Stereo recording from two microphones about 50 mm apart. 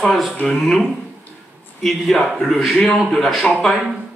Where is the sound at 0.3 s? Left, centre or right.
Left.